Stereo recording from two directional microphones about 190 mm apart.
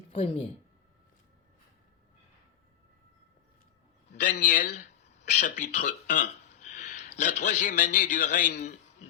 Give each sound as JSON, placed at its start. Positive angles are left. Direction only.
{"t": 0.1, "sound": "speech", "side_deg": 30}
{"t": 4.1, "sound": "speech", "side_deg": 45}